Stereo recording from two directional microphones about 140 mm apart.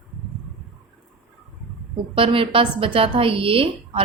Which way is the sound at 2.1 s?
40° right (ahead or behind).